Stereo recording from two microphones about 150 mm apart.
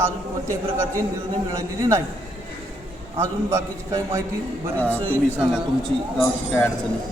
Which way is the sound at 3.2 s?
20° right (ahead or behind).